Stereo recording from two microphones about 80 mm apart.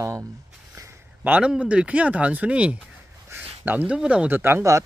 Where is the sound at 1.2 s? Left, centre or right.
Centre.